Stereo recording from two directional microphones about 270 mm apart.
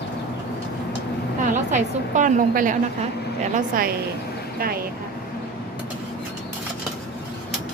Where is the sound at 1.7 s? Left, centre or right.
Right.